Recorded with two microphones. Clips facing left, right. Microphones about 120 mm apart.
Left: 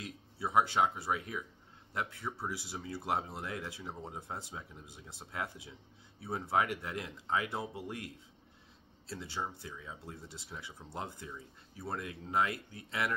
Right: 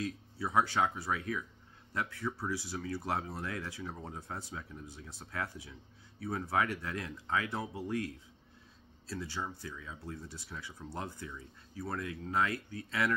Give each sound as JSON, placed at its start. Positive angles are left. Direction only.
{"t": 0.0, "sound": "speech", "side_deg": 20}
{"t": 9.0, "sound": "speech", "side_deg": 25}